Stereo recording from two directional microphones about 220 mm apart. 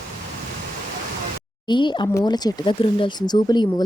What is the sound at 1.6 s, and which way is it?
Speech, 20° left (ahead or behind).